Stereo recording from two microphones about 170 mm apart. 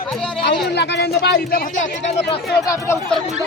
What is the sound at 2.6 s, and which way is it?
Speech, 20° left (ahead or behind).